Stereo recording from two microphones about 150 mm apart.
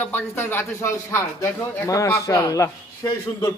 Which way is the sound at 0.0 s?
15° left (ahead or behind).